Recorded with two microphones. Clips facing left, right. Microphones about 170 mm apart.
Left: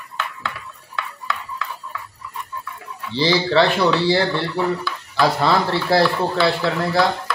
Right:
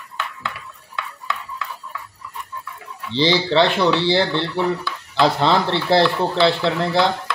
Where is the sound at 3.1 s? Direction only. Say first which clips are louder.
Even; 20° right (ahead or behind).